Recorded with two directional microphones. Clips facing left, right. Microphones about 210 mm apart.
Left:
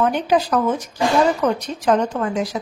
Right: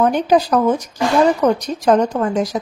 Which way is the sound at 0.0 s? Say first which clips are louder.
Right 3 dB; 40° right (ahead or behind).